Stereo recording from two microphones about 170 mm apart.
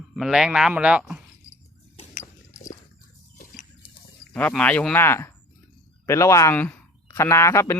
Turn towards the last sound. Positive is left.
turn(degrees=15)  # may be behind; listen again after turning